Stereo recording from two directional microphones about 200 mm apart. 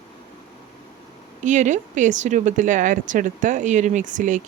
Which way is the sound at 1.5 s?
35° right (ahead or behind).